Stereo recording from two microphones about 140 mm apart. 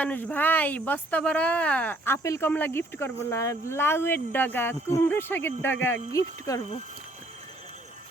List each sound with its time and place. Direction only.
0.0 s speech: 10° left (ahead or behind)